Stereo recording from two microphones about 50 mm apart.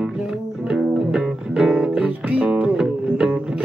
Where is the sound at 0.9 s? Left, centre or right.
Centre.